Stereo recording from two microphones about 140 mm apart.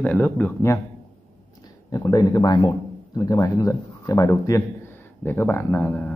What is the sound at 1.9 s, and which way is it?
Speech, 25° left (ahead or behind).